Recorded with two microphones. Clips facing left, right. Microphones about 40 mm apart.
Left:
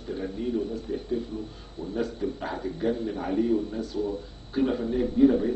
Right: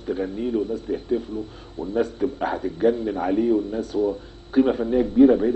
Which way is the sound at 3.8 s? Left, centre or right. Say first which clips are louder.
Right 7 dB; right.